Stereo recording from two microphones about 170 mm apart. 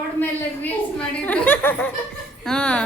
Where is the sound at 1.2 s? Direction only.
10° left (ahead or behind).